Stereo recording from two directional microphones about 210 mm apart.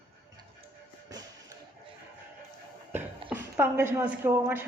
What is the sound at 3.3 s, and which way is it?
Speech, 10° right (ahead or behind).